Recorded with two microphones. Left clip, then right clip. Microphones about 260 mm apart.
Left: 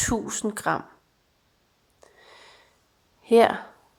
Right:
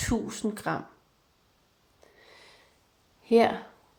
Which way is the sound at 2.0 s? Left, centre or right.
Left.